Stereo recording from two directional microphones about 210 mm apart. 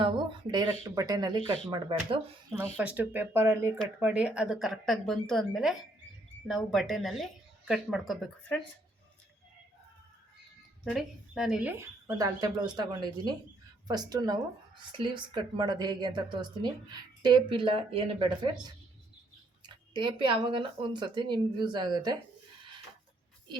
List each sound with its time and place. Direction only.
0.5 s a woman's voice: 20° right (ahead or behind)
2.7 s a woman's voice: 5° right (ahead or behind)
10.8 s a woman's voice: centre (ahead or behind); by 18.3 s 25° right (ahead or behind)
19.6 s a woman's voice: 20° right (ahead or behind)